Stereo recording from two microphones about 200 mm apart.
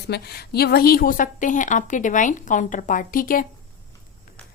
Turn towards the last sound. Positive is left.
turn(degrees=45)  # may be behind; listen again after turning